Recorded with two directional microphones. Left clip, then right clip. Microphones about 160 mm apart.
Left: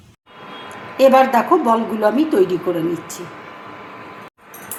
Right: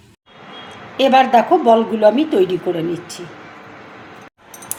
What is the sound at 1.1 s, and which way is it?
Speech, 25° right (ahead or behind).